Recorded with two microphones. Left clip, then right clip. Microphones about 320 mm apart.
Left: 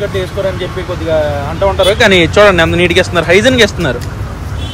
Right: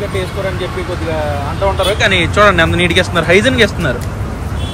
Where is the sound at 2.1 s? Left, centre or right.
Centre.